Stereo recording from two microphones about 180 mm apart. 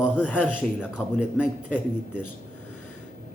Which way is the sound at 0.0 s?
10° left (ahead or behind).